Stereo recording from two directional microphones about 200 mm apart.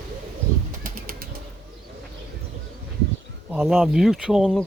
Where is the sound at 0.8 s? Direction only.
45° right (ahead or behind).